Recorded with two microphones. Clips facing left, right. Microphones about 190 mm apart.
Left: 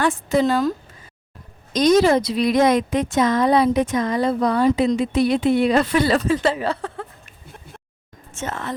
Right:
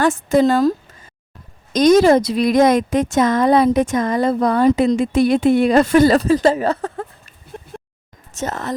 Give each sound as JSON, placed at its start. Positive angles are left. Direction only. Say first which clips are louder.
{"t": 0.0, "sound": "speech", "louder": "right 4 dB", "side_deg": -45}
{"t": 1.7, "sound": "speech", "louder": "right 4 dB", "side_deg": -45}
{"t": 8.3, "sound": "speech", "louder": "right 4 dB", "side_deg": -40}